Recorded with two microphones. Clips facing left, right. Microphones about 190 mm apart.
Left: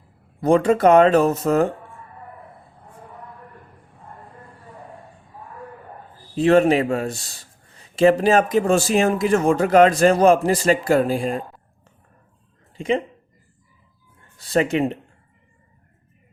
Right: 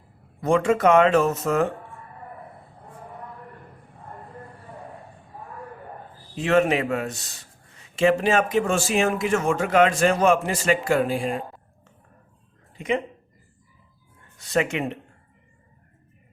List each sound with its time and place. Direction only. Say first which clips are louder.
0.4 s a man's voice: left 4 dB; 35° left (ahead or behind)
6.3 s a man's voice: left 5 dB; 35° left (ahead or behind)
12.7 s speech: left 3 dB; 30° left (ahead or behind)
14.3 s a man's voice: left 4 dB; 35° left (ahead or behind)